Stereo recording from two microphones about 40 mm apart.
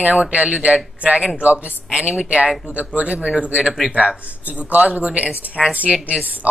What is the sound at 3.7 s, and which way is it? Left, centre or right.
Speech, centre.